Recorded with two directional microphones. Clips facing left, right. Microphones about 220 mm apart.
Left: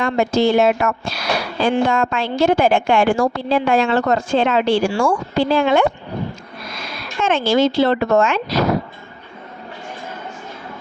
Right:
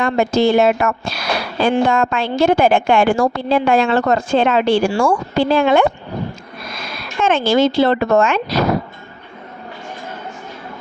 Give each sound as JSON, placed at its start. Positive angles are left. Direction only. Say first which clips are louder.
{"t": 0.0, "sound": "a woman's voice", "louder": "right 1 dB", "side_deg": -50}
{"t": 7.3, "sound": "a woman's voice", "louder": "right 2 dB", "side_deg": -55}